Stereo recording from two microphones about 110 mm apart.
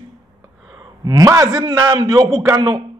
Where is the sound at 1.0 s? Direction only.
35° right (ahead or behind).